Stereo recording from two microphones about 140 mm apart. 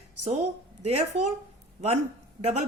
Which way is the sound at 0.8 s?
50° right (ahead or behind).